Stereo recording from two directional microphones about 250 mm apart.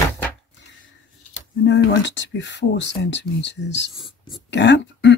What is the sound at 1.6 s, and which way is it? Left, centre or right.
Speech, left.